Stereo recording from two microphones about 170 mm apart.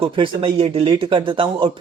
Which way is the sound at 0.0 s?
30° right (ahead or behind).